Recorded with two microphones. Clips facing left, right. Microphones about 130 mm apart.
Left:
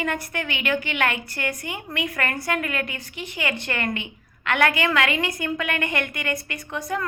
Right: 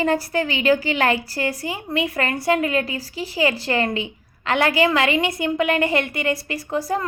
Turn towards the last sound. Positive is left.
turn(degrees=-30)  # may be behind; listen again after turning